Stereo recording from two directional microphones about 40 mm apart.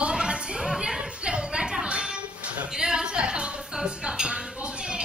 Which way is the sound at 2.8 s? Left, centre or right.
Centre.